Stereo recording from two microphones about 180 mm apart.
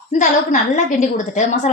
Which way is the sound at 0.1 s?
45° left (ahead or behind).